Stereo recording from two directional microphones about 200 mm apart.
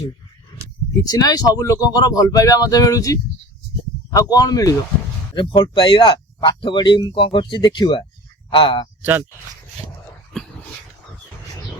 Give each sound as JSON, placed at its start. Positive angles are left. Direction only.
{"t": 1.0, "sound": "speech", "side_deg": 20}
{"t": 10.3, "sound": "dog", "side_deg": 0}